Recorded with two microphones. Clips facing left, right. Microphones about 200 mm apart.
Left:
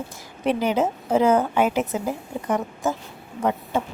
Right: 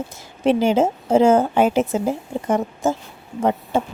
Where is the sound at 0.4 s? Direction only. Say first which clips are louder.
Right 5 dB; 25° right (ahead or behind).